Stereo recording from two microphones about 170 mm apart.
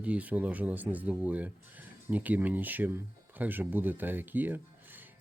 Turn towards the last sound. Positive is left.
turn(degrees=-10)  # may be behind; listen again after turning